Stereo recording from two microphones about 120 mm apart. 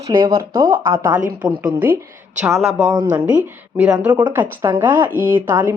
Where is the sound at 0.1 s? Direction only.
35° right (ahead or behind).